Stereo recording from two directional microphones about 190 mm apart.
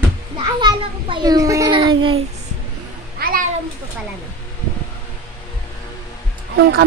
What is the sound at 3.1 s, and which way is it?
Meow, 50° right (ahead or behind).